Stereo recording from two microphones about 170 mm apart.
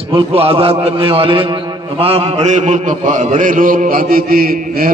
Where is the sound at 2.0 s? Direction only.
35° right (ahead or behind).